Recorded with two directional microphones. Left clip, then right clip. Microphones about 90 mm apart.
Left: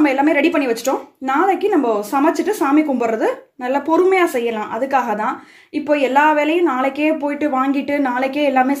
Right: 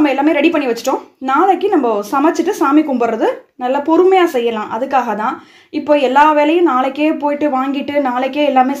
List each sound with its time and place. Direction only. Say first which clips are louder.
0.0 s a woman's voice: right 2 dB; 20° right (ahead or behind)